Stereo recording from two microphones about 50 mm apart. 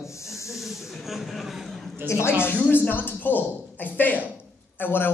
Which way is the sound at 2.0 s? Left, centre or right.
Left.